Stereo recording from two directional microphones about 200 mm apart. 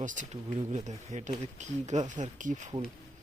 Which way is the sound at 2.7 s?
25° right (ahead or behind).